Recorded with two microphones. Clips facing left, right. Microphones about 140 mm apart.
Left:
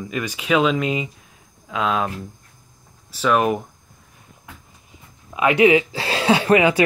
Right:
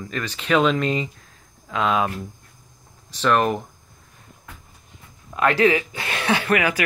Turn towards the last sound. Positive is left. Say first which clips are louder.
# left 6 dB
turn(degrees=25)  # may be behind; listen again after turning